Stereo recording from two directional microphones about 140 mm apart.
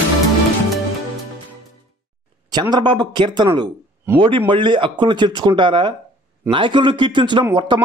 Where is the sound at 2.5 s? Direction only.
30° right (ahead or behind).